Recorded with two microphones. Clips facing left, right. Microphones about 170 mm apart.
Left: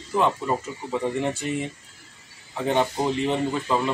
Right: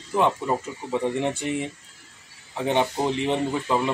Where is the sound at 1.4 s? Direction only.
15° right (ahead or behind).